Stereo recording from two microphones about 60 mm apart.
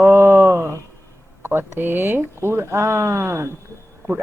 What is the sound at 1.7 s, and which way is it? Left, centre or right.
Speech, right.